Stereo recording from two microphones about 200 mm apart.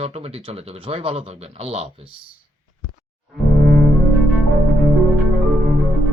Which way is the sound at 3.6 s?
60° right (ahead or behind).